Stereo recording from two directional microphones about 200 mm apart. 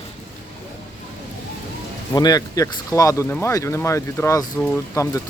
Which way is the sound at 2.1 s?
20° left (ahead or behind).